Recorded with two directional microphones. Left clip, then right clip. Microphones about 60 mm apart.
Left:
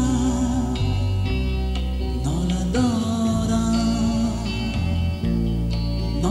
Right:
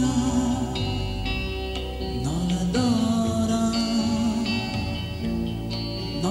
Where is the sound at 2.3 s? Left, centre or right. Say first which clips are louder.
Left 3 dB; left.